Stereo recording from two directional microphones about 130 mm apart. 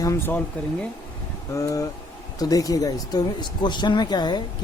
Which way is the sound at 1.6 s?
25° left (ahead or behind).